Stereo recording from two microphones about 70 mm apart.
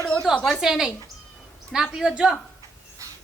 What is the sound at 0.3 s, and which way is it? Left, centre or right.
Speech, centre.